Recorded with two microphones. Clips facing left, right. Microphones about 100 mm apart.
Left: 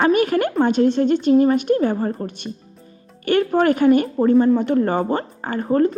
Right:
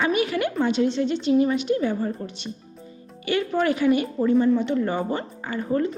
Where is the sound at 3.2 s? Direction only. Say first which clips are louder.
Left 6 dB; 50° left (ahead or behind).